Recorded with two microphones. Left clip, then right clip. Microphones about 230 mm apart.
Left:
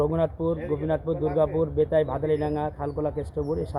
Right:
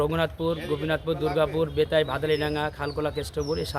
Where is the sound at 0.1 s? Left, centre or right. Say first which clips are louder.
Left 1 dB; centre.